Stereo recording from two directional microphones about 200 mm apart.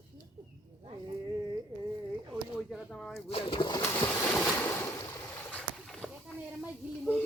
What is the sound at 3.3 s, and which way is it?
Speech, 25° left (ahead or behind).